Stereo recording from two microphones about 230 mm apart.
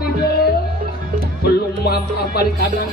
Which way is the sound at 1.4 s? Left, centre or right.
Left.